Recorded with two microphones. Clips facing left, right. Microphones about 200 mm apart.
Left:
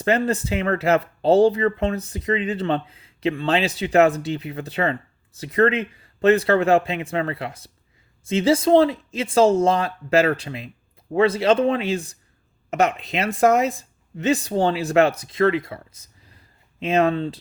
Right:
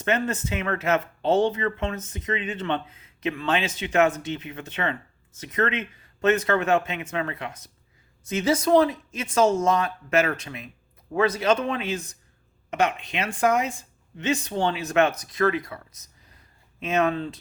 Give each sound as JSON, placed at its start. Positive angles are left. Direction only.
{"t": 0.0, "sound": "speech", "side_deg": 35}